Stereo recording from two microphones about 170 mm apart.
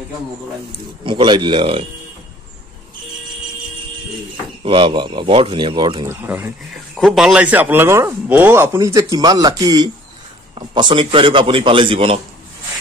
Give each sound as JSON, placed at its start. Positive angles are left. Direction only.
{"t": 1.0, "sound": "speech", "side_deg": -30}
{"t": 4.6, "sound": "speech", "side_deg": -30}
{"t": 6.0, "sound": "a man's voice", "side_deg": -10}